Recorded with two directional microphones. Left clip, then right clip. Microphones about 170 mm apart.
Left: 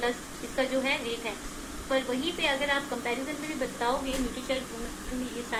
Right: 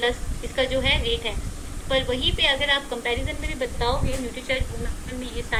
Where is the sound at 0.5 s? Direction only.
15° right (ahead or behind).